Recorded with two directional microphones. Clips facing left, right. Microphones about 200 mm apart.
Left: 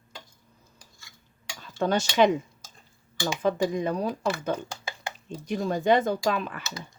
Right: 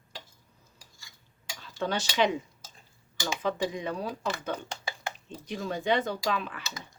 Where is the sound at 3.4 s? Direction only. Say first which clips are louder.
Left 6 dB; 45° left (ahead or behind).